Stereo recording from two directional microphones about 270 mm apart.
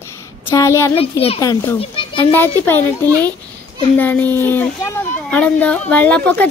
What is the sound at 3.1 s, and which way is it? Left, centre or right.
Speech, centre.